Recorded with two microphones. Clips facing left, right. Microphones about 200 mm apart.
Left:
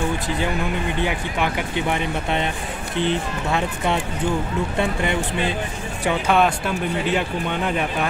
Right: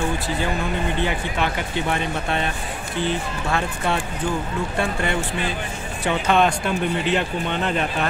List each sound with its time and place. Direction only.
1.0 s speech: 15° left (ahead or behind)
6.0 s speech: 10° left (ahead or behind)